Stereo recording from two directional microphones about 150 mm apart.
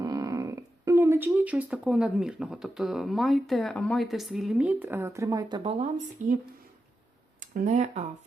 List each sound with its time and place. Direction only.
0.0 s speech: 25° right (ahead or behind)
6.2 s speech: 60° right (ahead or behind)